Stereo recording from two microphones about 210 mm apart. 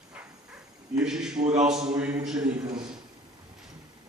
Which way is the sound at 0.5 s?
5° right (ahead or behind).